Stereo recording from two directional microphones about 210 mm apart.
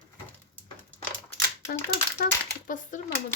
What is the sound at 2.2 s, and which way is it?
Speech, 40° left (ahead or behind).